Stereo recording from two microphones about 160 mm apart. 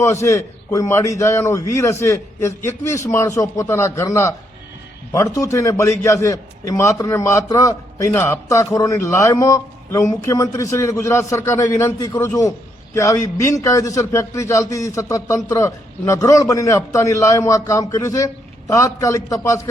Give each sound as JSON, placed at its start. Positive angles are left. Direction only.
{"t": 0.2, "sound": "a man's voice", "side_deg": 20}